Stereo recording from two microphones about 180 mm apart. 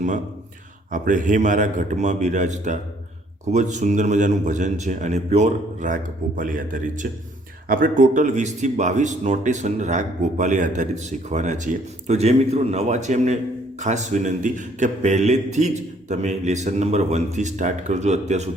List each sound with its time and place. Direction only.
0.9 s a man's voice: 45° right (ahead or behind)